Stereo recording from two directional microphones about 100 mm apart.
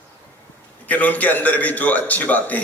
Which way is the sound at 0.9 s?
15° left (ahead or behind).